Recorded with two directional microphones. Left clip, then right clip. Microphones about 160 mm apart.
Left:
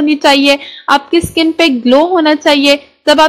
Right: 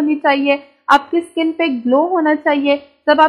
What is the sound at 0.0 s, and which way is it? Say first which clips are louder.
A woman's voice: left 6 dB; 30° left (ahead or behind).